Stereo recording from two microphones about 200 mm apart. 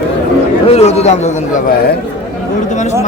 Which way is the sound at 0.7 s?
30° left (ahead or behind).